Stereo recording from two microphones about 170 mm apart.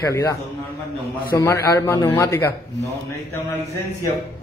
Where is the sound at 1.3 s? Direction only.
15° left (ahead or behind).